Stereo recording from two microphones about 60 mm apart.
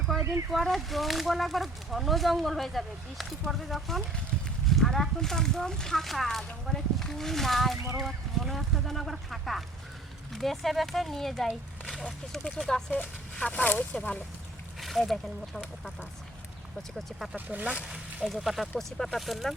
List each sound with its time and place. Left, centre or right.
0.2 s a sound: right
0.5 s speech: centre
14.8 s speech: centre
17.0 s speech: centre
17.3 s speech: right
17.8 s speech: centre